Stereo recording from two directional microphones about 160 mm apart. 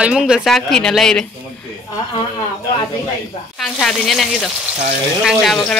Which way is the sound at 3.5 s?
Centre (ahead or behind).